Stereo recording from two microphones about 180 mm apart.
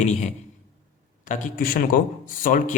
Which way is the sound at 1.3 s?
50° left (ahead or behind).